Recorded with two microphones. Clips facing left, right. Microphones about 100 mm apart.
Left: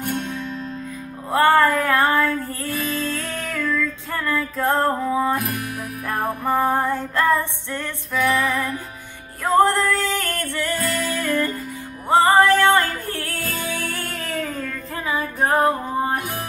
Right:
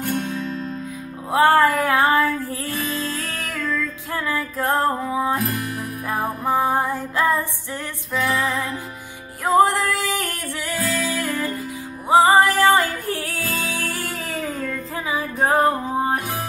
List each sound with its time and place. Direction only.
1.3 s music: 15° right (ahead or behind)